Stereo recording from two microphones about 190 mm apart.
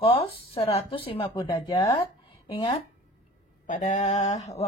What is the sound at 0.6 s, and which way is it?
A woman's voice, 30° left (ahead or behind).